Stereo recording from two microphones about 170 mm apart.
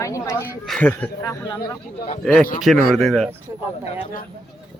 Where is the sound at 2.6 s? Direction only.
Centre (ahead or behind).